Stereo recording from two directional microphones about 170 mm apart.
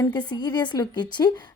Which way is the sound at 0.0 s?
25° left (ahead or behind).